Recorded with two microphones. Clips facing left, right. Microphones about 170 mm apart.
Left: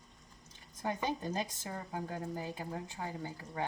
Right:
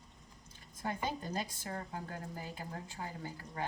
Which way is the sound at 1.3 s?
20° left (ahead or behind).